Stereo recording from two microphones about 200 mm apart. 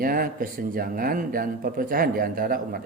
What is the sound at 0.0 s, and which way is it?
Speech, 45° right (ahead or behind).